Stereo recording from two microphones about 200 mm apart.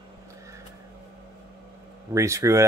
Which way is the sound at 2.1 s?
15° right (ahead or behind).